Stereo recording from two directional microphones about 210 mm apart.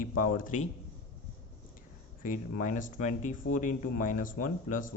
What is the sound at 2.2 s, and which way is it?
Speech, 40° left (ahead or behind).